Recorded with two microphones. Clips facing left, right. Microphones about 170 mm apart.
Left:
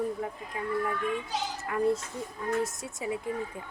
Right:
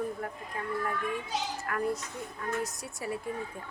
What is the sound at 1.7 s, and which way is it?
Speech, 20° left (ahead or behind).